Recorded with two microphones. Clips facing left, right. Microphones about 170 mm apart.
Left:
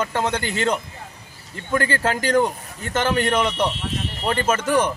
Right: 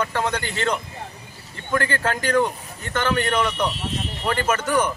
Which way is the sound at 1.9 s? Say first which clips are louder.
Left 2 dB; 30° left (ahead or behind).